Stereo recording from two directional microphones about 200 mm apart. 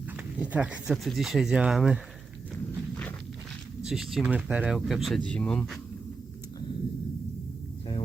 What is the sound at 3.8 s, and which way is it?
Speech, centre (ahead or behind).